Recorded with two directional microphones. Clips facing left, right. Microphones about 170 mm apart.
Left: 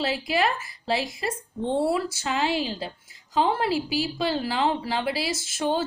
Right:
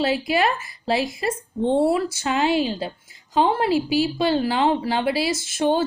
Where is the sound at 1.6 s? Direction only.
20° right (ahead or behind).